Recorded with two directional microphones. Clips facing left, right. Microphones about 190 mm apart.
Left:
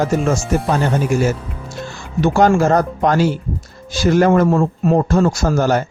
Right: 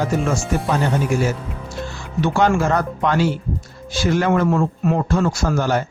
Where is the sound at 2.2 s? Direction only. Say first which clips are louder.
Left 4 dB; 40° left (ahead or behind).